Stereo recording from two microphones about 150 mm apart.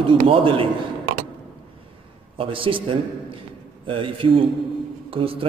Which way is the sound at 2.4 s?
35° right (ahead or behind).